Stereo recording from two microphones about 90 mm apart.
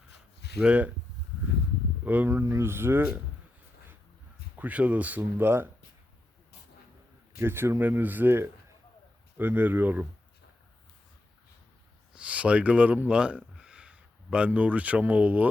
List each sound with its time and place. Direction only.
0.6 s speech: 15° right (ahead or behind)
2.0 s speech: 20° right (ahead or behind)
2.4 s speech: 30° right (ahead or behind)
4.5 s speech: 15° right (ahead or behind)
7.3 s speech: 25° right (ahead or behind)
12.1 s speech: 15° right (ahead or behind)